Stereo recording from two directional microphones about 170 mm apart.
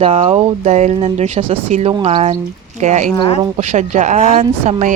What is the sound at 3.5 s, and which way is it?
Speech, 45° right (ahead or behind).